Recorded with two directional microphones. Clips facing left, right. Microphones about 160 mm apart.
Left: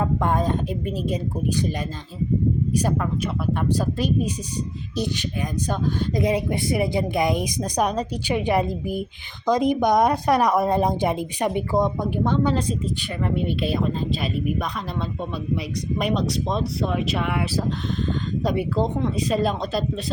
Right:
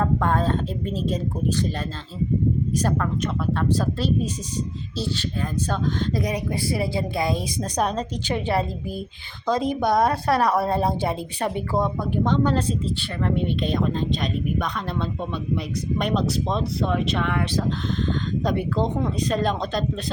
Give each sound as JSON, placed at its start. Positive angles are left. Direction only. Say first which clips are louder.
{"t": 0.0, "sound": "a woman's voice", "louder": "even", "side_deg": 15}
{"t": 2.7, "sound": "a woman's voice", "louder": "left 1 dB", "side_deg": 10}
{"t": 5.6, "sound": "a woman's voice", "louder": "left 1 dB", "side_deg": 10}
{"t": 6.2, "sound": "a woman's voice", "louder": "left 4 dB", "side_deg": 25}
{"t": 16.0, "sound": "speech", "louder": "even", "side_deg": 0}